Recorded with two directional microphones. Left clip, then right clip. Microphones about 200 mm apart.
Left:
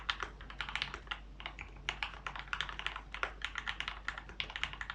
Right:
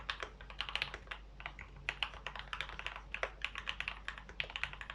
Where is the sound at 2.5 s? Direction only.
5° right (ahead or behind).